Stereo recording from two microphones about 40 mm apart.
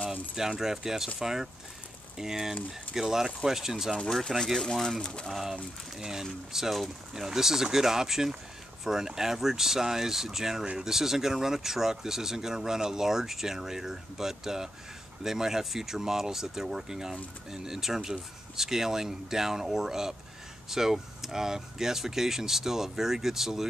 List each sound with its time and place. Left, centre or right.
0.0 s keys jangling: right
0.4 s speech: centre
4.6 s speech: centre
4.8 s speech: left
5.3 s speech: centre